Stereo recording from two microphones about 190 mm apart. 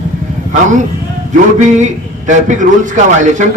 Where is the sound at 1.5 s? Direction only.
40° right (ahead or behind).